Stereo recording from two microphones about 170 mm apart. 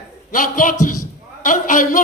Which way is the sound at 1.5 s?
50° left (ahead or behind).